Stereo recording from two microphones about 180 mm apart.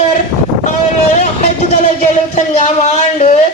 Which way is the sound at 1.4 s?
40° left (ahead or behind).